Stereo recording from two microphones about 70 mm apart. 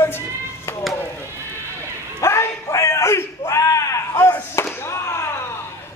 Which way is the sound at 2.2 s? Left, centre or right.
Left.